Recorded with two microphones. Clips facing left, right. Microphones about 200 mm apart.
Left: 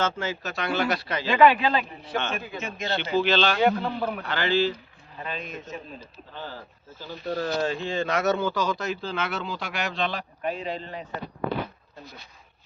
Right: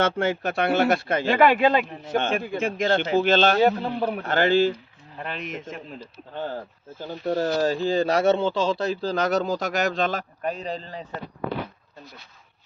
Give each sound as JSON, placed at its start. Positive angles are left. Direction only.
{"t": 0.0, "sound": "a man's voice", "side_deg": -55}
{"t": 4.2, "sound": "speech", "side_deg": -45}
{"t": 5.3, "sound": "a man's voice", "side_deg": -80}
{"t": 6.3, "sound": "a man's voice", "side_deg": -50}